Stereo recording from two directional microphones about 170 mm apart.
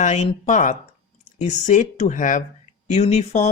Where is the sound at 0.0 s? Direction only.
40° left (ahead or behind).